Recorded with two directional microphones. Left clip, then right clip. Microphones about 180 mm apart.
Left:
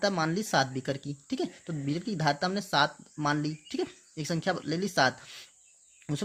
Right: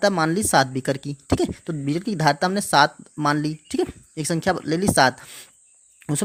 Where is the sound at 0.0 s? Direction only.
35° right (ahead or behind).